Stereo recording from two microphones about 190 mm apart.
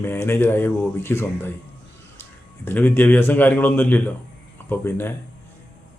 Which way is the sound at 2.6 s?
10° left (ahead or behind).